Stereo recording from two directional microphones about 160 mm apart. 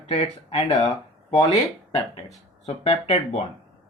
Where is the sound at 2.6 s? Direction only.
40° left (ahead or behind).